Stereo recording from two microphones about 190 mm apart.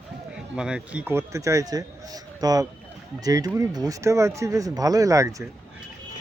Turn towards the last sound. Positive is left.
turn(degrees=-15)  # may be behind; listen again after turning